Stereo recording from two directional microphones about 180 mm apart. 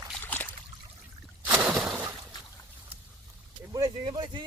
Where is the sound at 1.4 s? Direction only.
5° right (ahead or behind).